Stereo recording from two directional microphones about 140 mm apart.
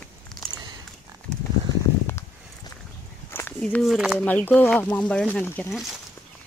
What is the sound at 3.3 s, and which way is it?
Walk, 15° left (ahead or behind).